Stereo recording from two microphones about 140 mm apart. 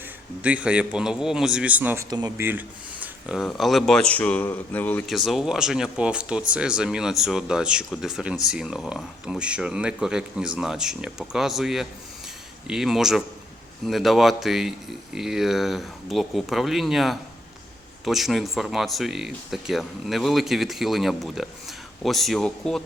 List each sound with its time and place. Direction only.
0.4 s a man's voice: 10° right (ahead or behind)
2.0 s speech: 25° right (ahead or behind)
2.4 s speech: 15° right (ahead or behind); by 5.0 s 10° left (ahead or behind)
5.0 s speech: centre (ahead or behind)